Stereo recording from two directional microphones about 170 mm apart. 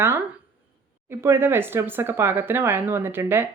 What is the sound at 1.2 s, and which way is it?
Speech, 15° right (ahead or behind).